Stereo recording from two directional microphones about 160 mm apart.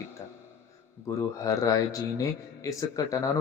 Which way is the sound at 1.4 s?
20° left (ahead or behind).